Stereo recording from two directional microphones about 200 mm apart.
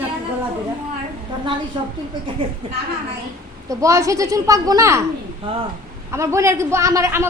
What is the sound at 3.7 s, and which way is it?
A man's voice, 15° right (ahead or behind).